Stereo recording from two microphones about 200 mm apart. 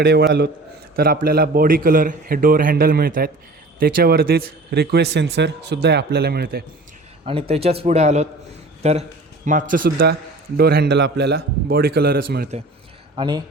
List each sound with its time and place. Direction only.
0.0 s a man's voice: 55° right (ahead or behind)
7.3 s a man's voice: 30° right (ahead or behind); by 12.5 s 50° right (ahead or behind)
13.1 s speech: 20° right (ahead or behind)